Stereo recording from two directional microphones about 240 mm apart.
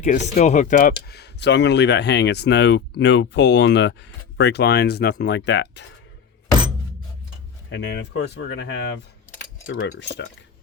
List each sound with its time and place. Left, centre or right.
0.0 s speech: left
1.0 s speech: left
7.7 s speech: left